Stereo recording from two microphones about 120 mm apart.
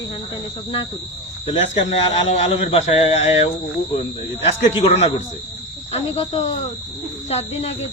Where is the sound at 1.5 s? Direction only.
75° left (ahead or behind).